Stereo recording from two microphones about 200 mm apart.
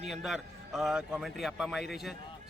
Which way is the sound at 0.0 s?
Centre (ahead or behind).